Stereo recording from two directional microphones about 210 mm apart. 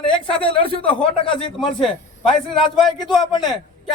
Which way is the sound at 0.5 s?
25° left (ahead or behind).